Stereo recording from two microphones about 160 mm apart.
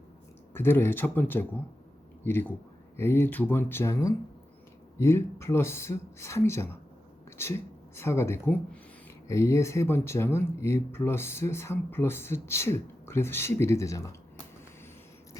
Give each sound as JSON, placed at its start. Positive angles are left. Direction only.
{"t": 0.5, "sound": "speech", "side_deg": 15}